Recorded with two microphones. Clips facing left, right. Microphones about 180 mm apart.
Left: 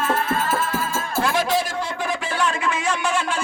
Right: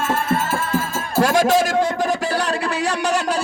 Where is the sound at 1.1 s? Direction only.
45° right (ahead or behind).